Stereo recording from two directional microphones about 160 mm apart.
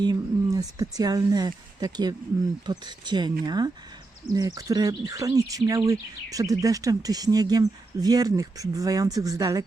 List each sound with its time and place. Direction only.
0.0 s speech: 25° right (ahead or behind)